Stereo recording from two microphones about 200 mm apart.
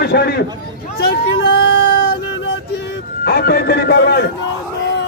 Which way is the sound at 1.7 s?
55° left (ahead or behind).